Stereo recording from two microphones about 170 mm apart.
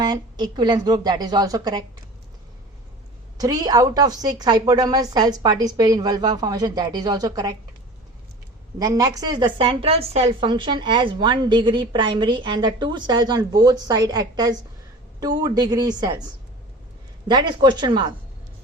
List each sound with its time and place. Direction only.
0.0 s a woman's voice: 25° right (ahead or behind)
3.3 s a woman's voice: 20° right (ahead or behind)
8.8 s a woman's voice: 20° right (ahead or behind)